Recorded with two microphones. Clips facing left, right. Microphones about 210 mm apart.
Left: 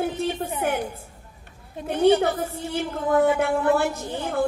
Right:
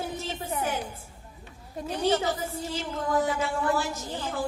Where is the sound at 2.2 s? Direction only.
60° left (ahead or behind).